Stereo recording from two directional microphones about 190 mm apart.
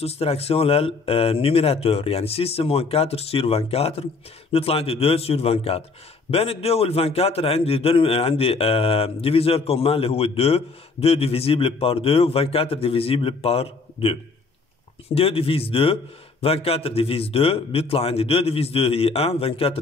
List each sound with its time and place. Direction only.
0.0 s a man's voice: 30° left (ahead or behind)